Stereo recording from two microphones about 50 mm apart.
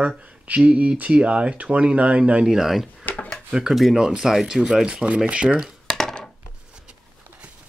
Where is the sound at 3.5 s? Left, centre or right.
Centre.